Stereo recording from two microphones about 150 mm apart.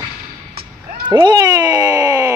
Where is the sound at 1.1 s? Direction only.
25° right (ahead or behind).